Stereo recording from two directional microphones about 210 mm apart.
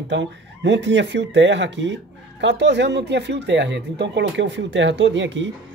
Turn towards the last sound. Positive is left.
turn(degrees=-60)  # may be behind; listen again after turning